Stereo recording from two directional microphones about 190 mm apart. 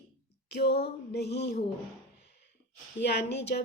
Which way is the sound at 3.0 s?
65° left (ahead or behind).